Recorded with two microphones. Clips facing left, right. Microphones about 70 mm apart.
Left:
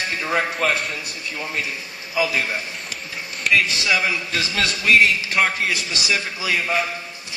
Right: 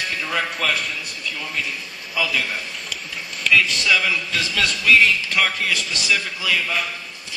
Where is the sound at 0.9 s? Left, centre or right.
Left.